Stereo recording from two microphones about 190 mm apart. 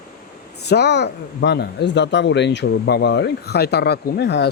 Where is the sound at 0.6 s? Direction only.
60° left (ahead or behind).